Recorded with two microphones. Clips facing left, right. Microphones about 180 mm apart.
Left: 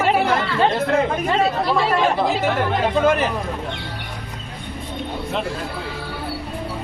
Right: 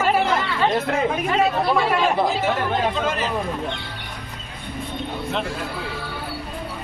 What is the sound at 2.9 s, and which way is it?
Speech, 55° left (ahead or behind).